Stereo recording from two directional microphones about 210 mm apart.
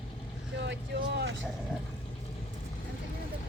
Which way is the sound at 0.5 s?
55° right (ahead or behind).